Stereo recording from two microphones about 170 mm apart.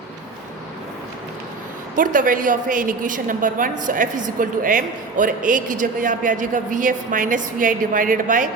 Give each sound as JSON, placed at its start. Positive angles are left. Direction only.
{"t": 2.0, "sound": "a woman's voice", "side_deg": -50}